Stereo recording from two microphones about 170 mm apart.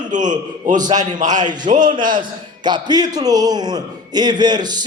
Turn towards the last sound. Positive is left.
turn(degrees=-25)  # may be behind; listen again after turning